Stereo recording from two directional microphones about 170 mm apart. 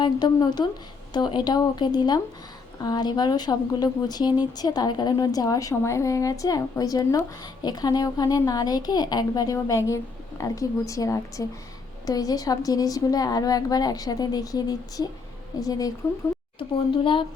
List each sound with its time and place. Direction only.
0.0 s a woman's voice: 25° left (ahead or behind)